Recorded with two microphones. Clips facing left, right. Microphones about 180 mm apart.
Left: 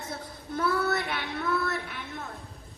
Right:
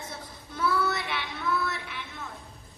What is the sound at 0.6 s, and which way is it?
Child singing, 50° left (ahead or behind).